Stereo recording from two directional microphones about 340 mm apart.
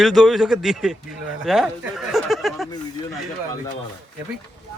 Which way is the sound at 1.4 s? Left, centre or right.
Centre.